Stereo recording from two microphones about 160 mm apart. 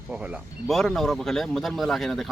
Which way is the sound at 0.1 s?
5° right (ahead or behind).